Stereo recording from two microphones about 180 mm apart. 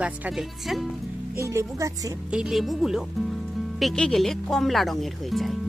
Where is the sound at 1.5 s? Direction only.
15° right (ahead or behind).